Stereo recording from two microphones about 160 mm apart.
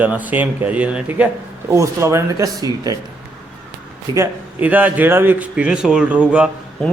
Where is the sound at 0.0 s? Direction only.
10° right (ahead or behind).